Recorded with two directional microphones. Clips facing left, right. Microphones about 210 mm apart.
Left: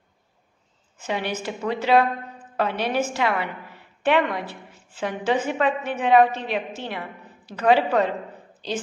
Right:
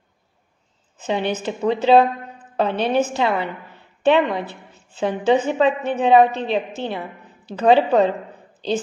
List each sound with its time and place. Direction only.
1.0 s a woman's voice: 25° right (ahead or behind)